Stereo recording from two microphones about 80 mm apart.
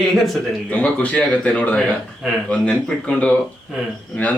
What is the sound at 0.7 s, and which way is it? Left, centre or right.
A man's voice, centre.